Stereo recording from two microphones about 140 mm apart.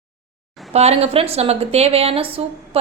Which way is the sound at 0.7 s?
50° right (ahead or behind).